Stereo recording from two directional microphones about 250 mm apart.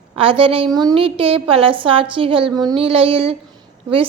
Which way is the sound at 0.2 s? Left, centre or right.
Right.